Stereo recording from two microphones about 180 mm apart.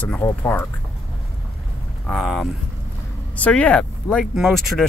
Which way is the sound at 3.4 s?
5° left (ahead or behind).